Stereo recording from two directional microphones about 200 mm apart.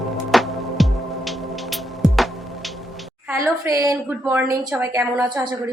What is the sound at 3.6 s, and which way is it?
A woman's voice, 15° right (ahead or behind).